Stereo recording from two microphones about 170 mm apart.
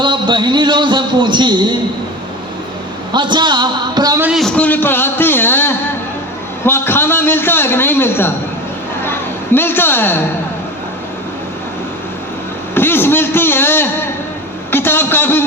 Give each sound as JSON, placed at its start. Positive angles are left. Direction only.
{"t": 0.0, "sound": "a sound", "side_deg": -25}
{"t": 3.1, "sound": "a man's voice", "side_deg": -25}
{"t": 4.2, "sound": "a man's voice", "side_deg": -5}
{"t": 9.6, "sound": "a man's voice", "side_deg": 15}
{"t": 12.7, "sound": "a man's voice", "side_deg": 15}